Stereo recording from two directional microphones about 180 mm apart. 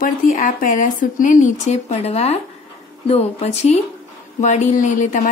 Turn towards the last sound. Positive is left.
turn(degrees=45)  # may be behind; listen again after turning